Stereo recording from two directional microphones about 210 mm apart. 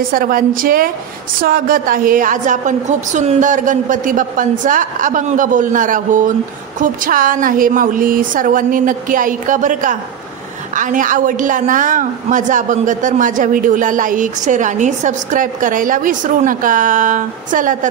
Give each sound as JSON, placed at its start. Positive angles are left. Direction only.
{"t": 0.1, "sound": "a woman's voice", "side_deg": -40}